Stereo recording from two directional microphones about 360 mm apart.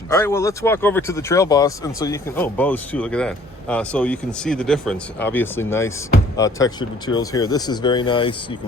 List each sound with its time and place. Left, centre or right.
0.1 s speech: centre